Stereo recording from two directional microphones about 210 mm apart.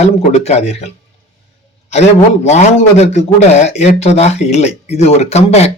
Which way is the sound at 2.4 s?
30° left (ahead or behind).